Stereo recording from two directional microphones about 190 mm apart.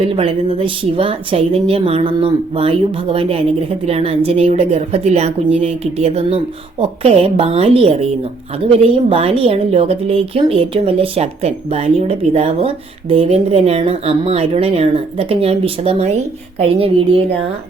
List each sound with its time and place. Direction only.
0.0 s a woman's voice: 30° right (ahead or behind)